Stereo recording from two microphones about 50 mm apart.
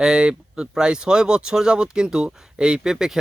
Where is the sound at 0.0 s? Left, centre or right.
Centre.